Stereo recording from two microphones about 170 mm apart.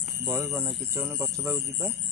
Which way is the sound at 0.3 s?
15° right (ahead or behind).